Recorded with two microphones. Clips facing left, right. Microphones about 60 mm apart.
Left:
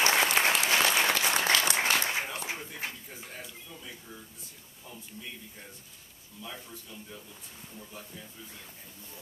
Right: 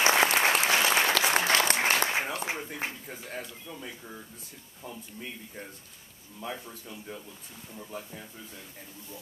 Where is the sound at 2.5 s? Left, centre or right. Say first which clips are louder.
Right 3 dB; right.